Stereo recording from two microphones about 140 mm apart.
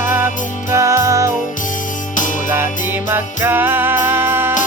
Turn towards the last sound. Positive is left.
turn(degrees=-15)  # may be behind; listen again after turning